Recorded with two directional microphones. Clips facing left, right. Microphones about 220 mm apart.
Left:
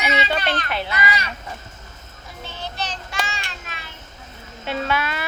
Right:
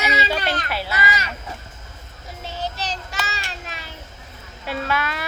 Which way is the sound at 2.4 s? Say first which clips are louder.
Right 3 dB; 35° right (ahead or behind).